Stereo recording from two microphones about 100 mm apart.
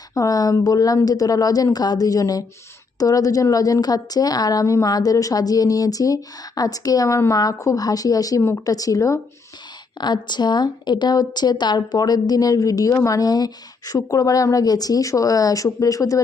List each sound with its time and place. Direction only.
0.1 s a woman's voice: 35° left (ahead or behind)
8.4 s speech: 25° left (ahead or behind)
8.7 s a woman's voice: 35° left (ahead or behind)
10.0 s a woman's voice: 45° left (ahead or behind)